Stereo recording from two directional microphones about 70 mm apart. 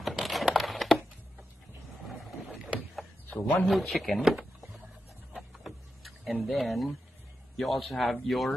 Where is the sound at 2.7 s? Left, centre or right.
Centre.